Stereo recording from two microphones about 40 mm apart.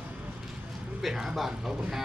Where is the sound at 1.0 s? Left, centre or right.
Centre.